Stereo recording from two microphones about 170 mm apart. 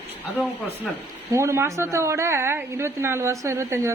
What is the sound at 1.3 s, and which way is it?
A woman's voice, 15° right (ahead or behind).